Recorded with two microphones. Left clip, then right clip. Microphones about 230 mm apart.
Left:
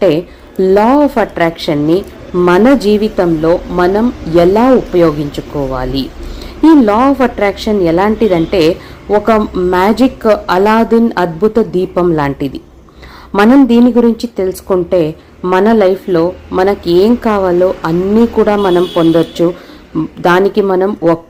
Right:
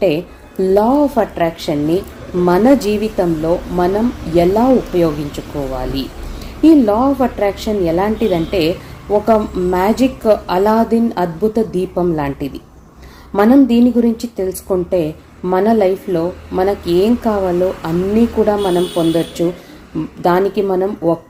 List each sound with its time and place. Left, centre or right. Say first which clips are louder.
0.6 s a woman's voice: left 4 dB; centre